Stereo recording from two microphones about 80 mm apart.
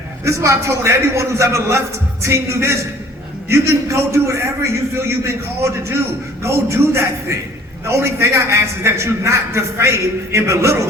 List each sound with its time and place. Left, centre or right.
0.3 s a man's voice: right